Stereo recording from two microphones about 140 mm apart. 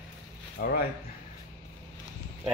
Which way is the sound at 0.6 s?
90° left.